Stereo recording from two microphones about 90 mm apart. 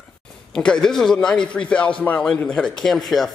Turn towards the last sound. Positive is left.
turn(degrees=0)  # may be behind; listen again after turning